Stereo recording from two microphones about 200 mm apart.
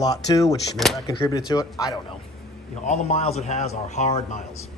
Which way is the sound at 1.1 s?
20° left (ahead or behind).